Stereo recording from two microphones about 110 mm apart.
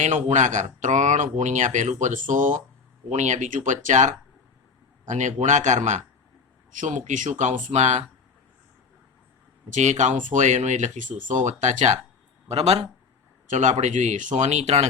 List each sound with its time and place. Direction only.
0.0 s speech: 90° right
9.7 s speech: 90° right
12.5 s speech: 70° right (ahead or behind)
13.6 s speech: 90° right